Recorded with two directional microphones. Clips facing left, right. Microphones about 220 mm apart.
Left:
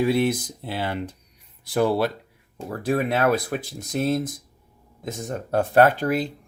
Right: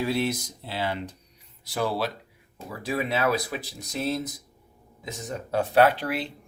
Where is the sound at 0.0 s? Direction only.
55° left (ahead or behind).